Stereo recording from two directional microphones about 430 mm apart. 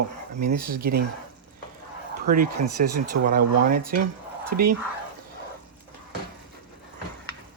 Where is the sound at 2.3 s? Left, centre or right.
Centre.